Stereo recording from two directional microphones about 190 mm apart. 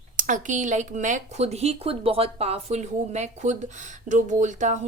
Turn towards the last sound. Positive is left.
turn(degrees=-40)  # may be behind; listen again after turning